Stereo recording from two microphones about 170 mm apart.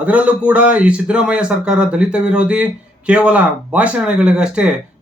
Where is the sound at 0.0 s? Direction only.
10° right (ahead or behind).